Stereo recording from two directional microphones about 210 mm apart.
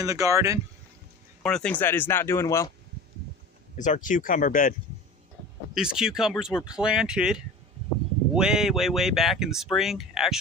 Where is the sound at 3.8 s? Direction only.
35° left (ahead or behind).